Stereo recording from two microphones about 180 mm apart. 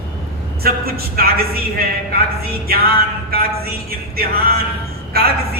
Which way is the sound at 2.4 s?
60° right (ahead or behind).